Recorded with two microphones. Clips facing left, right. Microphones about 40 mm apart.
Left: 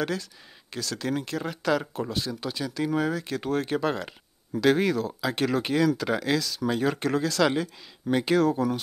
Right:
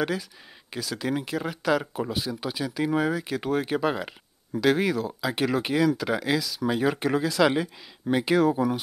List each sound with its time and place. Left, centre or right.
0.7 s speech: centre